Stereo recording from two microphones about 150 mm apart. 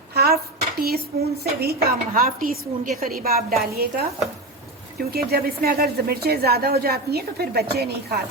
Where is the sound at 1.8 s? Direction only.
75° right (ahead or behind).